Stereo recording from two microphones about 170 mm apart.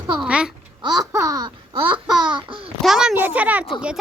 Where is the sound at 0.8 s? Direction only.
20° right (ahead or behind).